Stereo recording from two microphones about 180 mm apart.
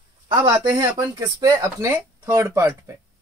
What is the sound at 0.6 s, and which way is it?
Speech, 20° right (ahead or behind).